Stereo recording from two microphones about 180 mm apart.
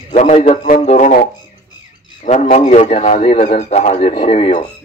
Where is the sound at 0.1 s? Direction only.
40° left (ahead or behind).